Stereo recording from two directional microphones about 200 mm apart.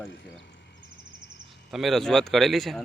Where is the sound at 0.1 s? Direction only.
65° left (ahead or behind).